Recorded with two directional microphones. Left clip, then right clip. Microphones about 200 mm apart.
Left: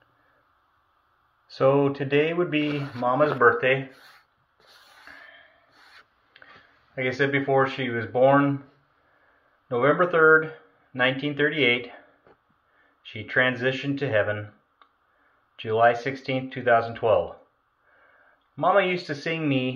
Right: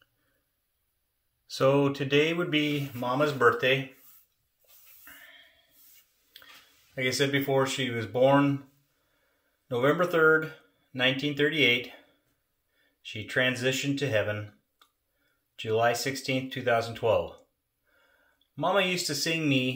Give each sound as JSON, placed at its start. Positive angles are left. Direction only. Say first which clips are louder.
{"t": 1.5, "sound": "speech", "louder": "left 3 dB", "side_deg": -45}
{"t": 7.0, "sound": "speech", "louder": "left 3 dB", "side_deg": -45}
{"t": 9.7, "sound": "speech", "louder": "left 4 dB", "side_deg": -45}
{"t": 13.0, "sound": "speech", "louder": "left 4 dB", "side_deg": -40}
{"t": 15.5, "sound": "speech", "louder": "left 5 dB", "side_deg": -45}
{"t": 18.6, "sound": "speech", "louder": "left 5 dB", "side_deg": -45}